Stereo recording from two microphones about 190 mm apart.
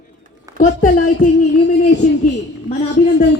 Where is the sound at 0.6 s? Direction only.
45° left (ahead or behind).